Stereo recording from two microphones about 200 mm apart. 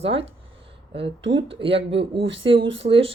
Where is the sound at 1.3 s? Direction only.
25° right (ahead or behind).